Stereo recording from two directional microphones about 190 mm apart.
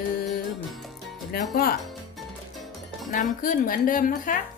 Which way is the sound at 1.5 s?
50° left (ahead or behind).